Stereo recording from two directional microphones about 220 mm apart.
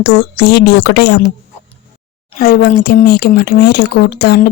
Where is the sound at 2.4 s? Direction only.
40° left (ahead or behind).